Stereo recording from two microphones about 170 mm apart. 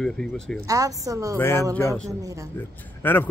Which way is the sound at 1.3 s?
15° left (ahead or behind).